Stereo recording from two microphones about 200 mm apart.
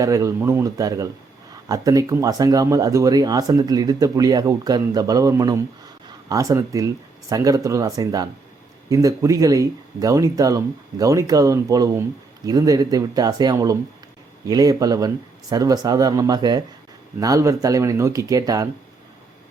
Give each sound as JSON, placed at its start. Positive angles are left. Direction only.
{"t": 0.0, "sound": "speech", "side_deg": -15}